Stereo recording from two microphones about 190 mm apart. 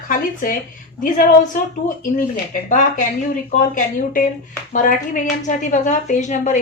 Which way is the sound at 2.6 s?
40° left (ahead or behind).